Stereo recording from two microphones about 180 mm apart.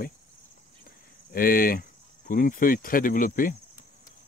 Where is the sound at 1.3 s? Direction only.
55° left (ahead or behind).